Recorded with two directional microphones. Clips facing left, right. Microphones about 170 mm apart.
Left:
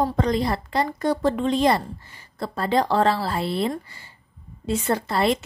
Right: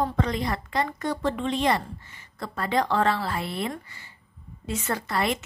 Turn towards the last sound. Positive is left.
turn(degrees=30)  # may be behind; listen again after turning